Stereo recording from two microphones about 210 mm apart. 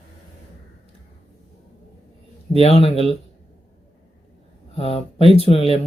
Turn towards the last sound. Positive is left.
turn(degrees=30)  # may be behind; listen again after turning